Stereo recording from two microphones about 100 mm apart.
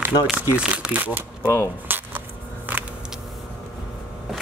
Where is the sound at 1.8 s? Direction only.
20° right (ahead or behind).